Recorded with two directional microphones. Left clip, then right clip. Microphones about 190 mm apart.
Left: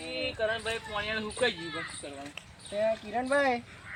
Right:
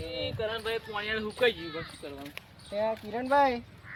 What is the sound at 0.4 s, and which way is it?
Speech, 20° right (ahead or behind).